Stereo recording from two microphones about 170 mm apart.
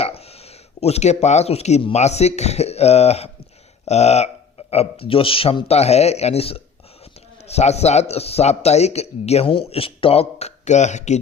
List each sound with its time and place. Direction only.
0.0 s speech: 35° left (ahead or behind)